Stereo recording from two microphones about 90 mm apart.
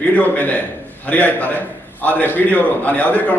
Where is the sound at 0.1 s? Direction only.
20° left (ahead or behind).